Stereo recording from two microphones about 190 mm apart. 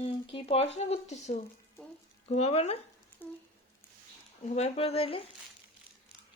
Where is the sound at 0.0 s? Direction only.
30° left (ahead or behind).